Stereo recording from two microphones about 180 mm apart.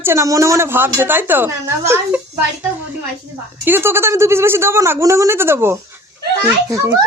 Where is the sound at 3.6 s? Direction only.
10° right (ahead or behind).